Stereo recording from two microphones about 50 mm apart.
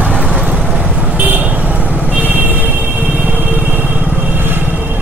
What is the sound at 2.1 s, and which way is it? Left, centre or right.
Vehicle, right.